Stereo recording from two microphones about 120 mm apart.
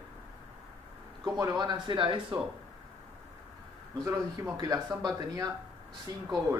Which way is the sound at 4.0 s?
25° right (ahead or behind).